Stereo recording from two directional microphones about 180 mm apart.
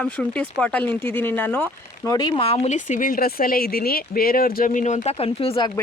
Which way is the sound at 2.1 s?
25° left (ahead or behind).